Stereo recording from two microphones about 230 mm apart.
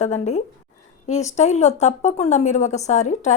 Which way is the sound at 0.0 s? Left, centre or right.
Left.